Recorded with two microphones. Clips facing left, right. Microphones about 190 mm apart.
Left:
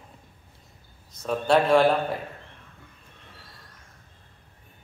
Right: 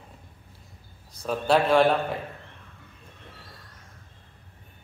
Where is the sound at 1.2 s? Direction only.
Centre (ahead or behind).